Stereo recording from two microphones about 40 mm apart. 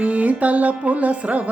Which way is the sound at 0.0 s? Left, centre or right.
Right.